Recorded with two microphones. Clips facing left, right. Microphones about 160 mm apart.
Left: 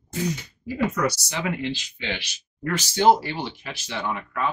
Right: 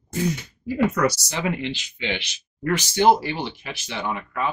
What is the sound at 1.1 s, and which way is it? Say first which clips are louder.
Speech: right 2 dB; 35° right (ahead or behind).